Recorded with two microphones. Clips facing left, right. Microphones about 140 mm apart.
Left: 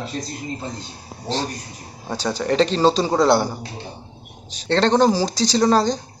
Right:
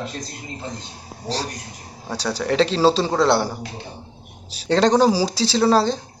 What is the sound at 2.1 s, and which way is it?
Speech, 5° right (ahead or behind).